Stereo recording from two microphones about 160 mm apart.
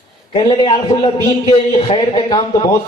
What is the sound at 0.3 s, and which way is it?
A man's voice, 30° left (ahead or behind).